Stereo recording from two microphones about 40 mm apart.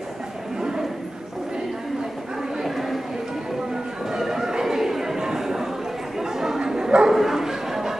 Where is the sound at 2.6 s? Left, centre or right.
Centre.